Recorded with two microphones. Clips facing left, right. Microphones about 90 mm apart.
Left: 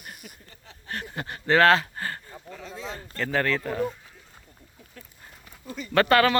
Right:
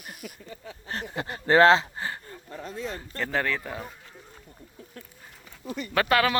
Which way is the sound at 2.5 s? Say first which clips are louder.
Right 3 dB; 60° left (ahead or behind).